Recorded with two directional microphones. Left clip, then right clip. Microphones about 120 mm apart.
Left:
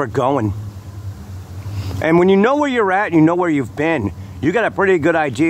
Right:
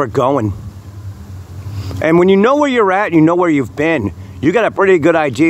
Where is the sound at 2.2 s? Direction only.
25° right (ahead or behind).